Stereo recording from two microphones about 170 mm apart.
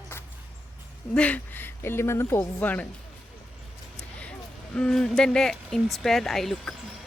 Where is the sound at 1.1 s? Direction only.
5° left (ahead or behind).